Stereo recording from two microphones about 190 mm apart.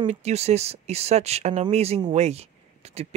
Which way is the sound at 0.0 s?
35° right (ahead or behind).